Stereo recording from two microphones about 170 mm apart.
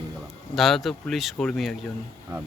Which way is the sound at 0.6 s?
Centre (ahead or behind).